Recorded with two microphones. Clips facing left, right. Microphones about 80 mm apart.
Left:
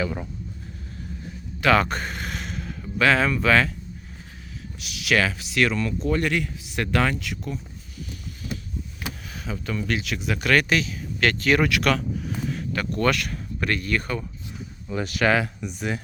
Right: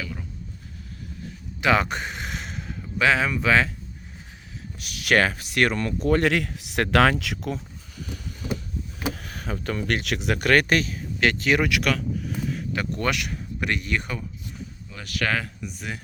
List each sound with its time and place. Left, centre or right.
1.6 s a sound: centre
4.8 s speech: right
6.1 s speech: right
9.2 s speech: right
10.4 s speech: right
11.2 s speech: centre
11.9 s a sound: centre
12.7 s speech: centre
14.8 s speech: left
15.3 s speech: centre